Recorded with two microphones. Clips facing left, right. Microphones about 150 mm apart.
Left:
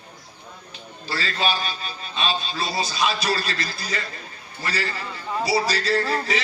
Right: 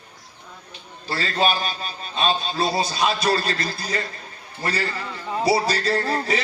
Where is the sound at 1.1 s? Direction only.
55° right (ahead or behind).